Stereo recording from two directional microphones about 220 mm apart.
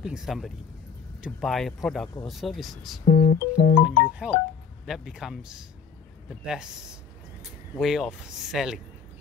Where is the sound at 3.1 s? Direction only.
35° left (ahead or behind).